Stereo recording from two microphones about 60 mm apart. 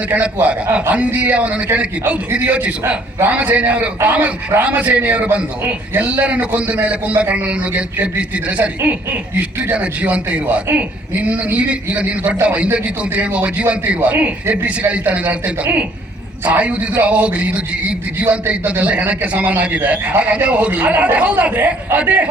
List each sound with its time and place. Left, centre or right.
0.1 s a man's voice: right
9.7 s a man's voice: right